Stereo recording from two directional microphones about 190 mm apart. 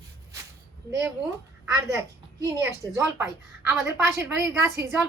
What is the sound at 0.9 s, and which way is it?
Speech, 15° right (ahead or behind).